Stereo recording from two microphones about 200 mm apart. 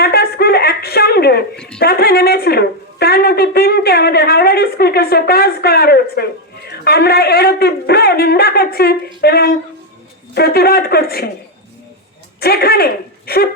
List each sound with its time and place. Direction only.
0.0 s a sound: 50° left (ahead or behind)
1.8 s a woman's voice: 50° left (ahead or behind)
12.4 s speech: 50° left (ahead or behind)